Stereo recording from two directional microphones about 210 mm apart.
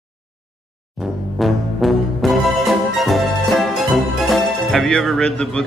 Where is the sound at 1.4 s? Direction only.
Centre (ahead or behind).